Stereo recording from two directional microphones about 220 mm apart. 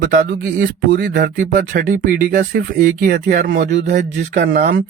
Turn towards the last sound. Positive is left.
turn(degrees=-40)  # may be behind; listen again after turning